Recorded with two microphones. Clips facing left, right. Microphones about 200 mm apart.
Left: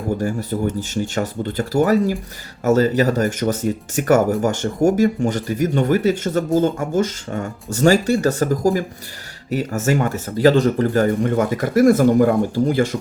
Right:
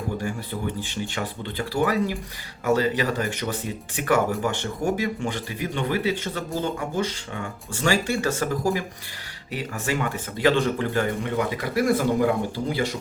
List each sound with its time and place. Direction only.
0.2 s speech: 40° left (ahead or behind)